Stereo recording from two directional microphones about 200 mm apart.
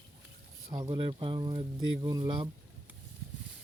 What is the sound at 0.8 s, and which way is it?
Speech, 25° right (ahead or behind).